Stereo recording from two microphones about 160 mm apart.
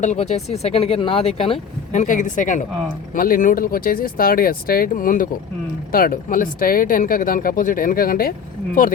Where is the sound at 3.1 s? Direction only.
65° left (ahead or behind).